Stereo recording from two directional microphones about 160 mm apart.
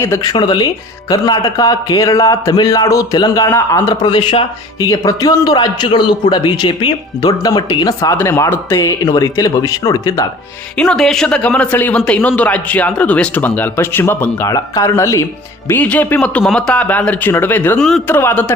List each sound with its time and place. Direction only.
0.0 s a man's voice: 20° left (ahead or behind)
4.9 s a man's voice: 20° left (ahead or behind)
10.8 s speech: 5° left (ahead or behind)